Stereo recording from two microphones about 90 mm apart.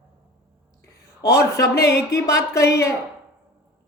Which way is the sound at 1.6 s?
35° left (ahead or behind).